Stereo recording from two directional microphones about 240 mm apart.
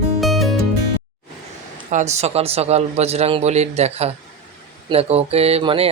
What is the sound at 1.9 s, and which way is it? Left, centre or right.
Speech, right.